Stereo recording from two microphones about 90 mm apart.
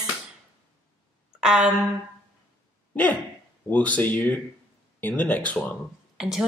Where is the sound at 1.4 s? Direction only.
5° right (ahead or behind).